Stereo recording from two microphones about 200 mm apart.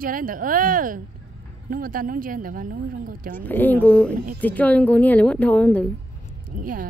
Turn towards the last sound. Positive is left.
turn(degrees=-45)  # may be behind; listen again after turning